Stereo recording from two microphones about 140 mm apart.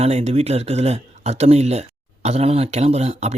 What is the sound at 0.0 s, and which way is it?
Speech, 50° right (ahead or behind).